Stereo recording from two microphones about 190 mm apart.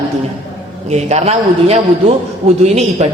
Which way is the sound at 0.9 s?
35° right (ahead or behind).